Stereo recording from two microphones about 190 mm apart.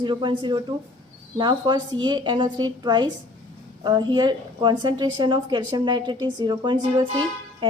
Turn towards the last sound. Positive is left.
turn(degrees=-25)  # may be behind; listen again after turning